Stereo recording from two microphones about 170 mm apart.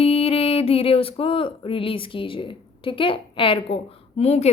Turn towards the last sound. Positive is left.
turn(degrees=40)  # may be behind; listen again after turning